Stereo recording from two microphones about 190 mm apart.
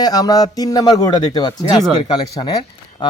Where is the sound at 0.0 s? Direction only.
20° left (ahead or behind).